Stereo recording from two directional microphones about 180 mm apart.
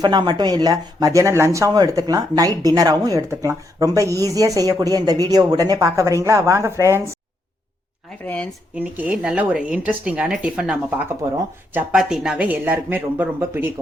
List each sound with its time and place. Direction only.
0.0 s speech: 25° right (ahead or behind)
8.2 s speech: 10° left (ahead or behind)
8.7 s speech: 5° right (ahead or behind)